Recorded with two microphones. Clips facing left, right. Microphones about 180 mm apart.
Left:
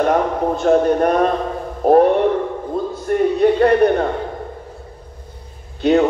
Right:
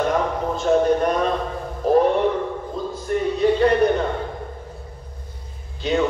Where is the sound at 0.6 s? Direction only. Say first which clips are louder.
Left 3 dB; 55° left (ahead or behind).